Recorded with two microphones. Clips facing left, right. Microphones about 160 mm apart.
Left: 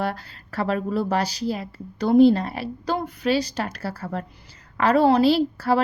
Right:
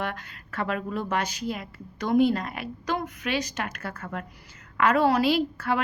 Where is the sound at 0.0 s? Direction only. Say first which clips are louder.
Left 5 dB; 35° left (ahead or behind).